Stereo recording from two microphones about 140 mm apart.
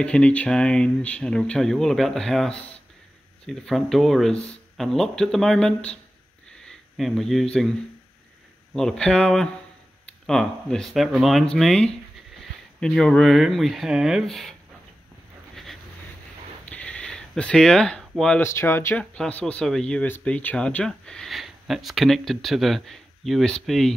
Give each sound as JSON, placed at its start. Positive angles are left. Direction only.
{"t": 0.0, "sound": "speech", "side_deg": 10}
{"t": 8.7, "sound": "speech", "side_deg": 5}
{"t": 15.5, "sound": "a sound", "side_deg": 0}
{"t": 18.4, "sound": "speech", "side_deg": 20}
{"t": 19.1, "sound": "speech", "side_deg": 5}